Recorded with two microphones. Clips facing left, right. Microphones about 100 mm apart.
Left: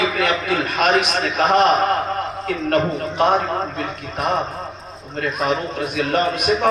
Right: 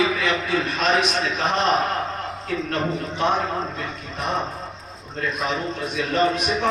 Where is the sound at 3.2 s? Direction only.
55° left (ahead or behind).